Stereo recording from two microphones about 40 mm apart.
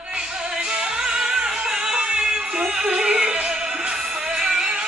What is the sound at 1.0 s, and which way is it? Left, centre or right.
Music, centre.